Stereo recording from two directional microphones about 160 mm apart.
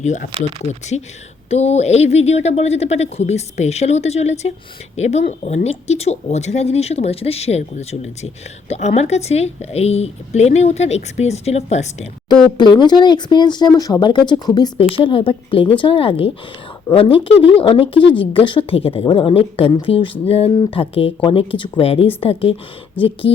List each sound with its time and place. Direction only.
0.0 s a woman's voice: 50° left (ahead or behind)
12.5 s speech: 30° left (ahead or behind)